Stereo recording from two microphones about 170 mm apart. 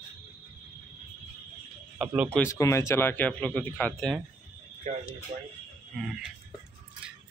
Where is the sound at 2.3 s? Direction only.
15° left (ahead or behind).